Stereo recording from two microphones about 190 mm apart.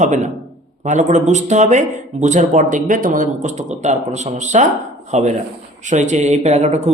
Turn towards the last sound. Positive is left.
turn(degrees=-35)  # may be behind; listen again after turning